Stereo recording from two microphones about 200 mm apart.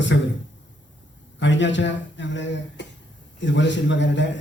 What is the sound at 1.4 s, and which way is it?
A man's voice, 65° left (ahead or behind).